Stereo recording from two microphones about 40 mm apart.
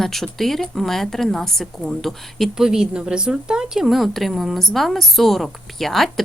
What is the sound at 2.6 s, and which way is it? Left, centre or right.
A woman's voice, centre.